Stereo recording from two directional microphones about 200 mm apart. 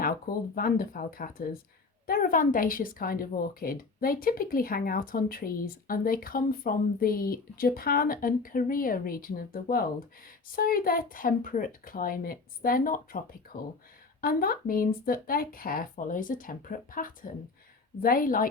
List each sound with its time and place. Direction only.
0.0 s speech: 45° left (ahead or behind)